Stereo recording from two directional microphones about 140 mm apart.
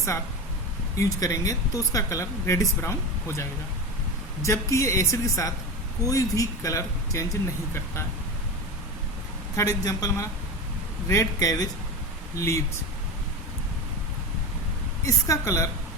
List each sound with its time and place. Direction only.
0.9 s speech: 20° left (ahead or behind)
4.4 s speech: 20° left (ahead or behind)
9.6 s speech: 25° left (ahead or behind)
15.0 s speech: 20° left (ahead or behind)